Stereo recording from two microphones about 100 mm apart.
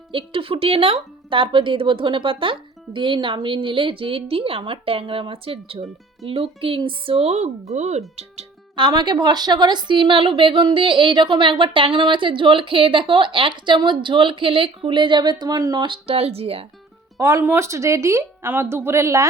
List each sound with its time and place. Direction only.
0.1 s a woman's voice: 60° right (ahead or behind); by 8.4 s 90° right
8.7 s a woman's voice: 45° right (ahead or behind)
16.0 s speech: 80° right
17.2 s a woman's voice: 30° right (ahead or behind)